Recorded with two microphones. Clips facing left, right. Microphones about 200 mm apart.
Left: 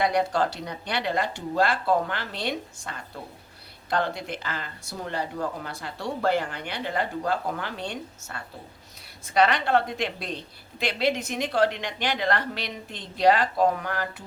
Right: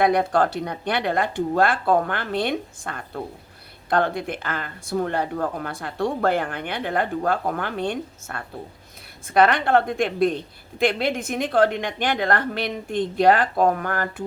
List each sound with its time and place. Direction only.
0.0 s speech: 55° right (ahead or behind)